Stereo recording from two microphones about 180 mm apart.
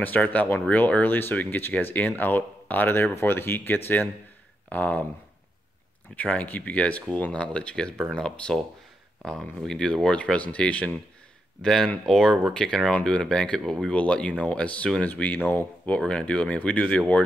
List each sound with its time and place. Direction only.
0.0 s speech: 10° left (ahead or behind)
6.1 s speech: 10° left (ahead or behind)